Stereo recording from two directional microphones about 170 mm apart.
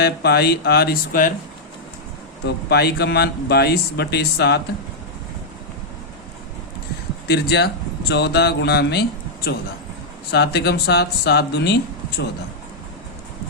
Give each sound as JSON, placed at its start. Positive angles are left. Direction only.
{"t": 0.0, "sound": "speech", "side_deg": 70}
{"t": 2.6, "sound": "speech", "side_deg": 70}
{"t": 7.3, "sound": "speech", "side_deg": 75}